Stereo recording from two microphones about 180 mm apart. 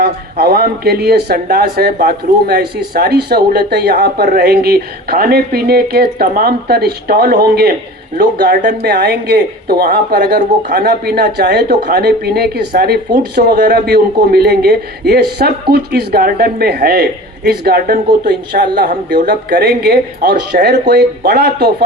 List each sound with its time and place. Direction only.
0.0 s speech: 60° right (ahead or behind)